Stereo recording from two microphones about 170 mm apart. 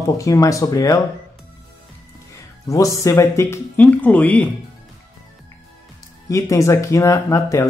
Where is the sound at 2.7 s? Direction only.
20° left (ahead or behind).